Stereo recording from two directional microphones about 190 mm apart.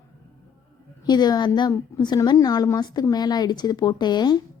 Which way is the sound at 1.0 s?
20° left (ahead or behind).